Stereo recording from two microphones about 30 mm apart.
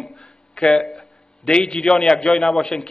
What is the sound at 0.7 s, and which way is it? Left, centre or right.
A man's voice, left.